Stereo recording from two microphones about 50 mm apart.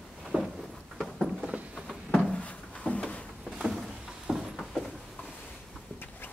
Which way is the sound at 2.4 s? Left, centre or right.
Left.